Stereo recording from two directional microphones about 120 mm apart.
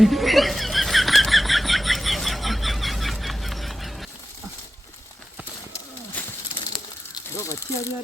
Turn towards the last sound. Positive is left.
turn(degrees=25)  # may be behind; listen again after turning